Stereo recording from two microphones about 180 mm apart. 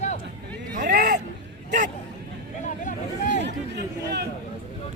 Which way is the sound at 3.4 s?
70° right (ahead or behind).